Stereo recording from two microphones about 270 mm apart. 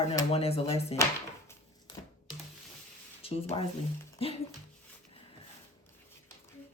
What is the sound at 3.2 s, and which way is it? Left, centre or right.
Speech, left.